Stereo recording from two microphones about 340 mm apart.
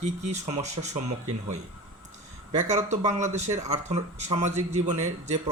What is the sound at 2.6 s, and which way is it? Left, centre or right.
Speech, centre.